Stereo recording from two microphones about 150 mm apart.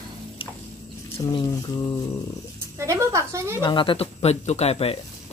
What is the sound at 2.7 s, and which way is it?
Speech, 20° right (ahead or behind).